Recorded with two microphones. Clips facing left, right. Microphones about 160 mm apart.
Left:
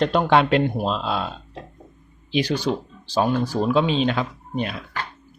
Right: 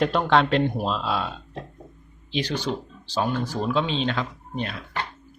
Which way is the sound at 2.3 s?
10° left (ahead or behind).